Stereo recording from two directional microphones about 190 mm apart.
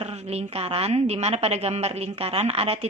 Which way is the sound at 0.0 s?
35° right (ahead or behind).